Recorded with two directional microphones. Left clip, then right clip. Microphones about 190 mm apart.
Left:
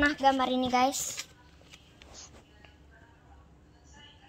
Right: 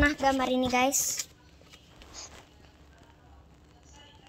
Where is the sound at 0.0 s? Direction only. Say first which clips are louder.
Even; 10° left (ahead or behind).